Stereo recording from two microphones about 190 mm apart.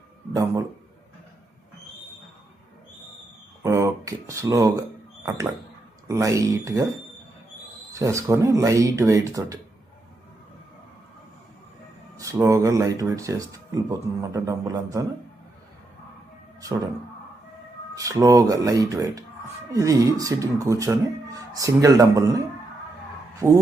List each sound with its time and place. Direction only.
3.6 s a sound: 15° right (ahead or behind)
6.1 s speech: 15° right (ahead or behind)
7.9 s speech: 15° right (ahead or behind)
12.1 s speech: 15° right (ahead or behind)
17.9 s speech: 15° right (ahead or behind)